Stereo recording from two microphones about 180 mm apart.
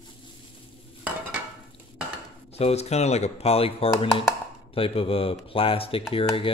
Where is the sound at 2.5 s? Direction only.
35° left (ahead or behind).